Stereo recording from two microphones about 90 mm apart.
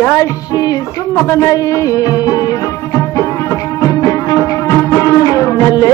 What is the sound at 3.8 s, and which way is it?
Music, 35° left (ahead or behind).